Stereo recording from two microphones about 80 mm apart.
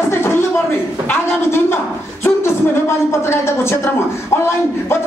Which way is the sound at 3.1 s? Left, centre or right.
Left.